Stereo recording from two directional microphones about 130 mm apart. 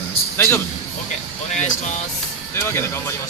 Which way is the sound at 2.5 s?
20° left (ahead or behind).